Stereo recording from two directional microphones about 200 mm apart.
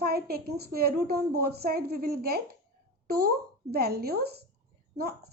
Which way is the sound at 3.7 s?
50° right (ahead or behind).